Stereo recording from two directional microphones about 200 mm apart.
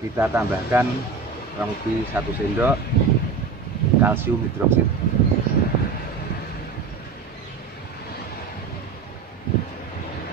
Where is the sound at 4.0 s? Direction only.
10° right (ahead or behind).